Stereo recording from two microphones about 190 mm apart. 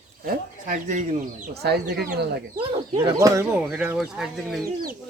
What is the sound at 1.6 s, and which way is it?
Speech, 60° right (ahead or behind).